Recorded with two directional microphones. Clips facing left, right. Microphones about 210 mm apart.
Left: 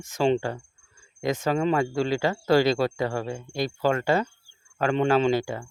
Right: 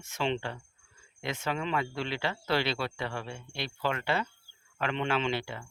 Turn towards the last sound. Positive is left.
turn(degrees=40)  # may be behind; listen again after turning